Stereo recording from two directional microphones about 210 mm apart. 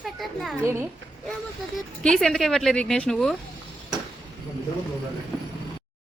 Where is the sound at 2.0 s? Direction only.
5° left (ahead or behind).